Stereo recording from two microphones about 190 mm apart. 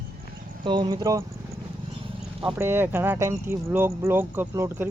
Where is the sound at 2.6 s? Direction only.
10° right (ahead or behind).